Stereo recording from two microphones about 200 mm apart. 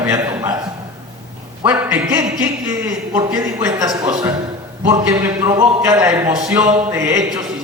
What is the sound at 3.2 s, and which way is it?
A man's voice, 20° right (ahead or behind).